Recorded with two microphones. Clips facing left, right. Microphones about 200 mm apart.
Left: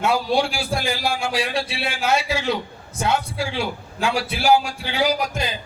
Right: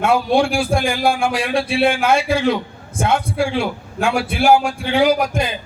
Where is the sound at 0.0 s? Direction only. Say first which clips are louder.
Right 4 dB; 55° right (ahead or behind).